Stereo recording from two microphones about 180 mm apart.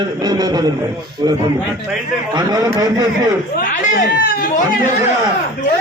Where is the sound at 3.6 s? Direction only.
50° left (ahead or behind).